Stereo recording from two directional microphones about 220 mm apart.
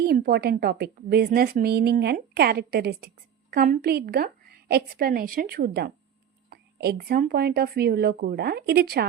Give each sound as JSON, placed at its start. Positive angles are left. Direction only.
{"t": 0.0, "sound": "a woman's voice", "side_deg": -45}